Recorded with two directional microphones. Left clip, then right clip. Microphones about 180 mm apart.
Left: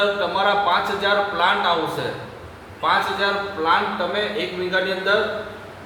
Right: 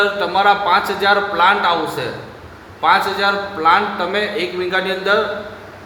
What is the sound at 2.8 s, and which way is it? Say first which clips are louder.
A man's voice: right 5 dB; 55° right (ahead or behind).